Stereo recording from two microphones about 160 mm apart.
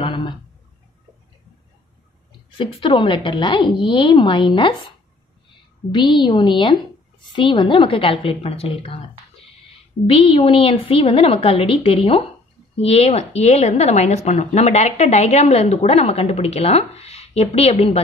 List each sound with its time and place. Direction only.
0.0 s a sound: 30° left (ahead or behind)
2.5 s a woman's voice: 35° left (ahead or behind)
5.9 s a woman's voice: 25° left (ahead or behind)
10.0 s a woman's voice: 35° left (ahead or behind)